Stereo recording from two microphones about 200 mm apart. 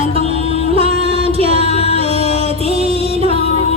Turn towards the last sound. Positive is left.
turn(degrees=-30)  # may be behind; listen again after turning